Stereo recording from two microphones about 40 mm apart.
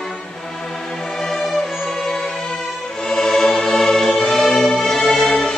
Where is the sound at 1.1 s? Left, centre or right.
Centre.